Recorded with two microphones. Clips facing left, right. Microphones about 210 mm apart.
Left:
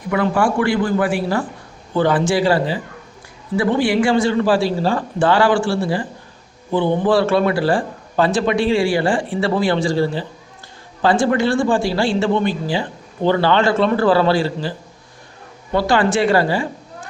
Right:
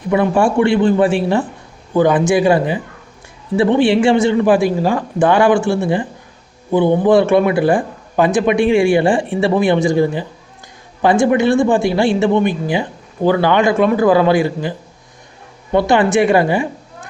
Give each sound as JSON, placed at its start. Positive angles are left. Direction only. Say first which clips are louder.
{"t": 0.1, "sound": "a man's voice", "louder": "right 4 dB", "side_deg": -25}